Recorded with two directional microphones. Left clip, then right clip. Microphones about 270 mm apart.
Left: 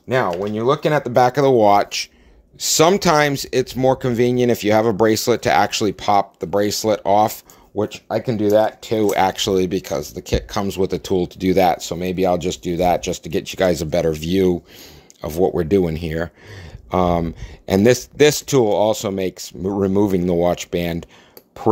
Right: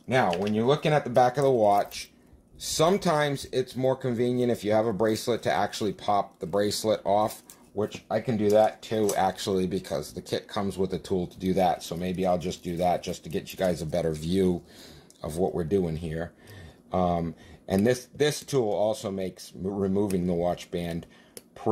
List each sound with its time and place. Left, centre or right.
0.5 s speech: left